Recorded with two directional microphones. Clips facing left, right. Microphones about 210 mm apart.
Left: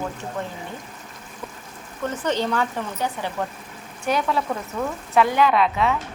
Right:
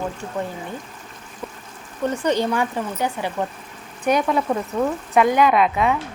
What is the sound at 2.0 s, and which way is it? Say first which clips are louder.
A woman's voice: right 3 dB; 15° right (ahead or behind).